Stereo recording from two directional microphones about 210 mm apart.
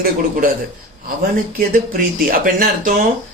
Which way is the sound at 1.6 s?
40° right (ahead or behind).